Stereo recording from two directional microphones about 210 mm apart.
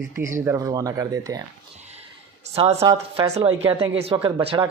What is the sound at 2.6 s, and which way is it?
Speech, 30° right (ahead or behind).